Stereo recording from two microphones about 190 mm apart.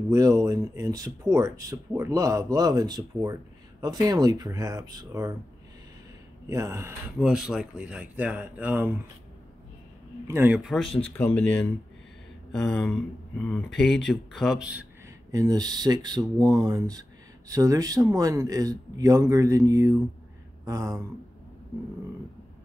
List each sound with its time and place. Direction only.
0.1 s speech: 15° right (ahead or behind)
6.5 s speech: 15° right (ahead or behind)
7.2 s speech: 5° right (ahead or behind)
10.2 s speech: 10° right (ahead or behind)
11.1 s speech: 10° left (ahead or behind); by 14.9 s 5° right (ahead or behind)
15.3 s speech: 20° right (ahead or behind)